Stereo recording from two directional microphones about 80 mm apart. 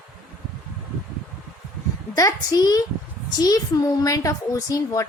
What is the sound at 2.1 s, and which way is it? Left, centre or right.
A woman's voice, left.